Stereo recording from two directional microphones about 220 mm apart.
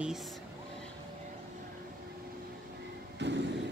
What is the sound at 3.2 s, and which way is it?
Vehicle, 50° right (ahead or behind).